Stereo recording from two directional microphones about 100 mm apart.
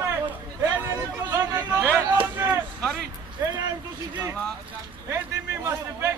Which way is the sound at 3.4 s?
30° right (ahead or behind).